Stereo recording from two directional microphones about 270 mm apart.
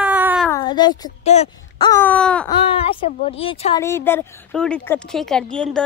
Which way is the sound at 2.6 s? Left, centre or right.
Left.